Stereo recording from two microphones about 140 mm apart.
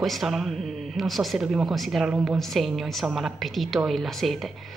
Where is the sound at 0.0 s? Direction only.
Centre (ahead or behind).